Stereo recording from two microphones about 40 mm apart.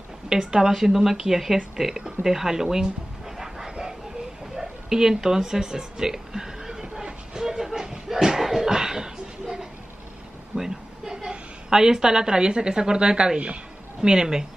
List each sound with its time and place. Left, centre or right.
0.3 s a woman's voice: centre
3.3 s vehicle: centre
4.6 s a sound: centre
14.0 s a woman's voice: centre